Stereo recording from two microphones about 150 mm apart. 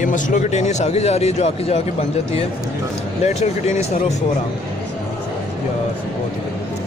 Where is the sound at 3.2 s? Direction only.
45° left (ahead or behind).